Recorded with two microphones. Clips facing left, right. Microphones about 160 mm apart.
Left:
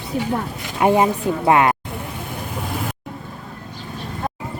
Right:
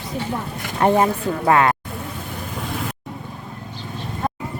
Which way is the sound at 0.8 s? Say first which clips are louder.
Left 1 dB; 15° left (ahead or behind).